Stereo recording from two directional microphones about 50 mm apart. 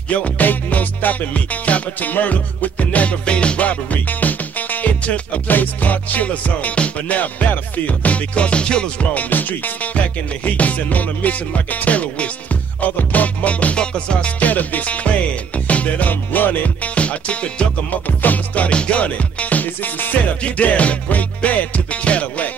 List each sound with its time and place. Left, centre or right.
0.1 s music: left
9.1 s music: left
18.0 s music: left